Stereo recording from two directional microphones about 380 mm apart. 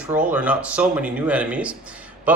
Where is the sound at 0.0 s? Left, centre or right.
Centre.